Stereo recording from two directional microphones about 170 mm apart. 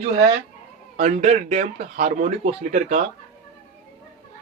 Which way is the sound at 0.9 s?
45° right (ahead or behind).